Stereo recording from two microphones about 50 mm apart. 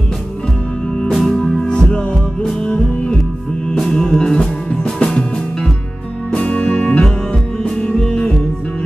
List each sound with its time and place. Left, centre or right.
1.1 s music: centre